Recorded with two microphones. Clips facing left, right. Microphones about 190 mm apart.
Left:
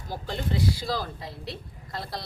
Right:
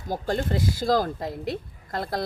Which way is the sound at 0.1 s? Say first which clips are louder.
Right 5 dB; 50° right (ahead or behind).